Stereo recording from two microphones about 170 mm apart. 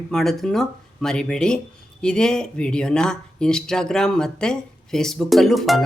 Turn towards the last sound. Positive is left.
turn(degrees=0)  # may be behind; listen again after turning